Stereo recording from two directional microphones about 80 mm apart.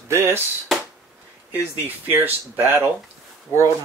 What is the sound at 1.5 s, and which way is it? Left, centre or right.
Speech, right.